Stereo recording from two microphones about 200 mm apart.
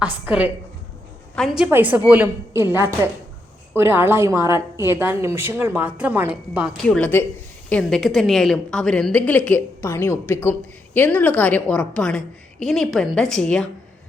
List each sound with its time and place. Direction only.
0.0 s a woman's voice: 5° right (ahead or behind)
6.8 s a woman's voice: 5° left (ahead or behind)